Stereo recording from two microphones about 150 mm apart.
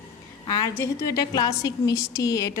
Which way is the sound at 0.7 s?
20° left (ahead or behind).